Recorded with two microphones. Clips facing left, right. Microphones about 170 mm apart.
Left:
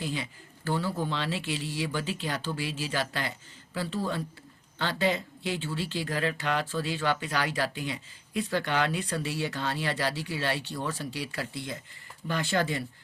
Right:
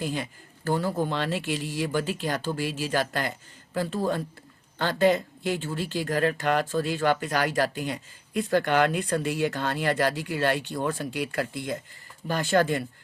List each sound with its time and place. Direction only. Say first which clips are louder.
0.0 s speech: right 3 dB; 45° right (ahead or behind)